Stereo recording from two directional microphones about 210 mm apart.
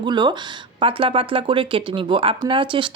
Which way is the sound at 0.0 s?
20° right (ahead or behind).